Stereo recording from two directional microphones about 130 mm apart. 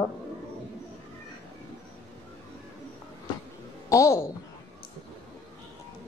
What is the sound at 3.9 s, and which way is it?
Speech, 20° left (ahead or behind).